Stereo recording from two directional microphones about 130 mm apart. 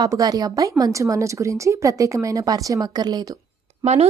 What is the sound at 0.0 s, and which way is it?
A woman's voice, 30° right (ahead or behind).